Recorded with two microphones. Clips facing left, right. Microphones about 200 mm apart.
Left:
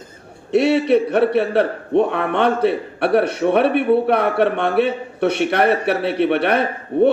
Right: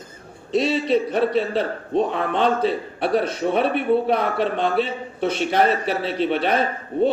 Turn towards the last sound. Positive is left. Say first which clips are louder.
# left 5 dB
turn(degrees=65)  # may be behind; listen again after turning